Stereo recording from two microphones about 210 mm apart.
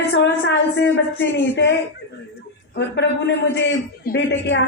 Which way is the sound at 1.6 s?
55° left (ahead or behind).